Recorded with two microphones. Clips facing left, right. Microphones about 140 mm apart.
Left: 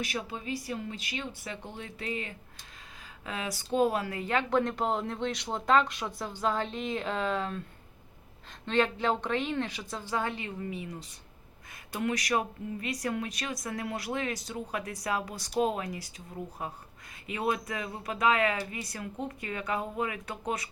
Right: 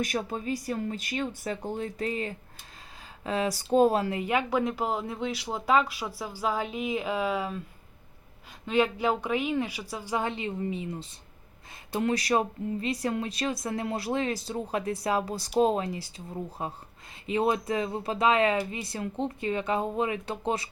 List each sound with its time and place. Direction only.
0.0 s speech: 45° right (ahead or behind)
4.2 s speech: 10° right (ahead or behind)
8.6 s a woman's voice: 10° right (ahead or behind); by 10.9 s 25° right (ahead or behind)
11.9 s speech: 30° right (ahead or behind)